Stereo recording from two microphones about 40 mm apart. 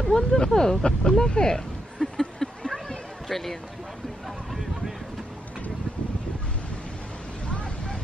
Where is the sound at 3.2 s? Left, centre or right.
Centre.